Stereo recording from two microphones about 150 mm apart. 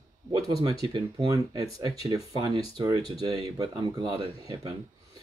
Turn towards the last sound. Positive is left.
turn(degrees=-30)  # may be behind; listen again after turning